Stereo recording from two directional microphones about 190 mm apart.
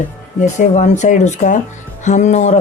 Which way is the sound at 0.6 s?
40° left (ahead or behind).